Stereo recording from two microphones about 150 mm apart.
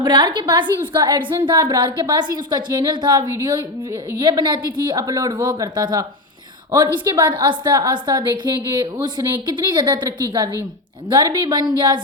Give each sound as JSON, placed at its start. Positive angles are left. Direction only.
{"t": 0.0, "sound": "a woman's voice", "side_deg": -30}